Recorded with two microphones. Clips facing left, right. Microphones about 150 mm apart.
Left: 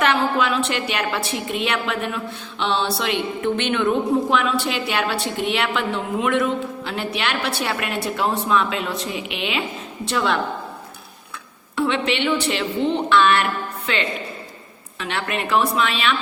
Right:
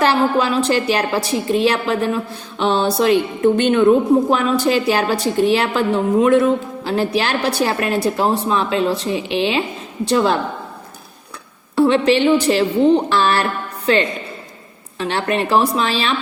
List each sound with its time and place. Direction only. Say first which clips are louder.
0.0 s a woman's voice: right 4 dB; 35° right (ahead or behind)
11.8 s a woman's voice: right 8 dB; 40° right (ahead or behind)